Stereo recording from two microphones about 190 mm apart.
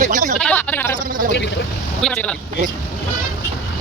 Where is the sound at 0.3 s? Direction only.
10° left (ahead or behind).